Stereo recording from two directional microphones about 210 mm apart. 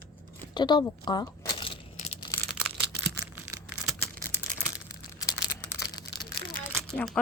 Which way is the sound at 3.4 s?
10° right (ahead or behind).